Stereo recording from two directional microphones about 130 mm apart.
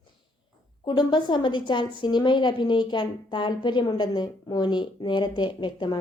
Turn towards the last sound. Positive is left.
turn(degrees=35)  # may be behind; listen again after turning